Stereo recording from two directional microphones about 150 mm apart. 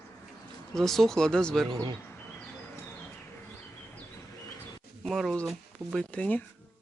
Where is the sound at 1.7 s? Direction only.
30° right (ahead or behind).